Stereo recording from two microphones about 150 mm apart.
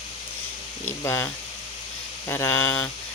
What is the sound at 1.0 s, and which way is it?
Speech, 15° left (ahead or behind).